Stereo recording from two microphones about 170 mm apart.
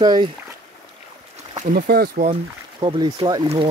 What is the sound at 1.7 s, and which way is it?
Speech, 60° right (ahead or behind).